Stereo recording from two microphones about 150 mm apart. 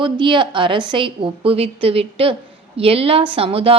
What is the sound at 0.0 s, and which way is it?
A woman's voice, 35° right (ahead or behind).